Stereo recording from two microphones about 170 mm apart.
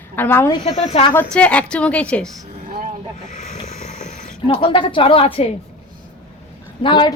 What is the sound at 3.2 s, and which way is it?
Snake, 45° left (ahead or behind).